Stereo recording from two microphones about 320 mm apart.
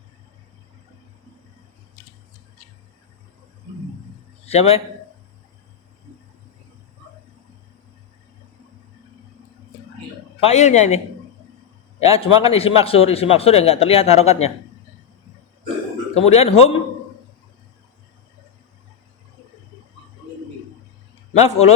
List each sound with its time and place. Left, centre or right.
4.4 s speech: centre
10.4 s a man's voice: left
12.1 s a man's voice: centre
16.2 s a man's voice: centre
21.3 s a man's voice: centre